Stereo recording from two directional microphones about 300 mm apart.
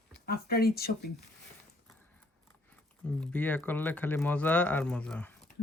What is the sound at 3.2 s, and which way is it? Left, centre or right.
Speech, centre.